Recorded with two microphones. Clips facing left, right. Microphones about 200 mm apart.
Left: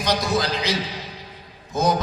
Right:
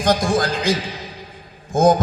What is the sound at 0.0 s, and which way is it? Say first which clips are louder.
A man's voice: right 4 dB; 50° right (ahead or behind).